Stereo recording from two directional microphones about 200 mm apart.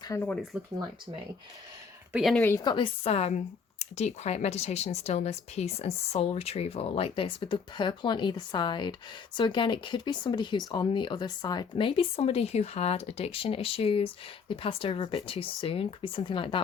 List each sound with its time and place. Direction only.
0.1 s speech: 10° left (ahead or behind)
2.1 s speech: centre (ahead or behind)
2.4 s speech: 15° left (ahead or behind)